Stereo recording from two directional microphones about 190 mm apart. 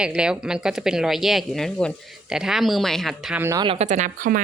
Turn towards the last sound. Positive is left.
turn(degrees=-45)  # may be behind; listen again after turning